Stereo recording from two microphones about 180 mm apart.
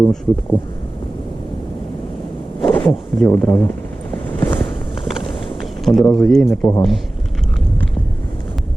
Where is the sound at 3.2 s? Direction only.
10° left (ahead or behind).